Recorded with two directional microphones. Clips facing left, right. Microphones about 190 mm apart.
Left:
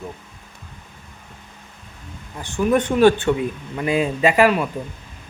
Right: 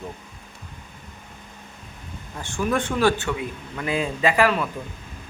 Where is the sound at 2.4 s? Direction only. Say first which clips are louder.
Left 5 dB; 20° left (ahead or behind).